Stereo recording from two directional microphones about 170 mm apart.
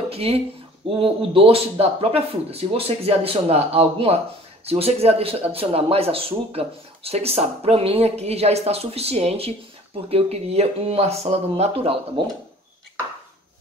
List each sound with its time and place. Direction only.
0.1 s speech: 35° right (ahead or behind)